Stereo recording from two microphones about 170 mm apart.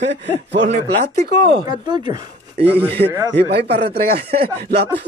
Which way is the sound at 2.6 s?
80° right.